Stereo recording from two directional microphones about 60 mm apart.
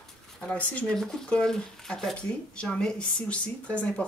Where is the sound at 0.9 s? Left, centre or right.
Centre.